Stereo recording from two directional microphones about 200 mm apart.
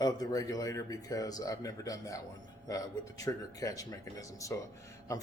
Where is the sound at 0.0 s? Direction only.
20° left (ahead or behind).